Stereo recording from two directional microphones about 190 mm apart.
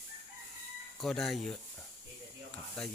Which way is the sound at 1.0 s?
Centre (ahead or behind).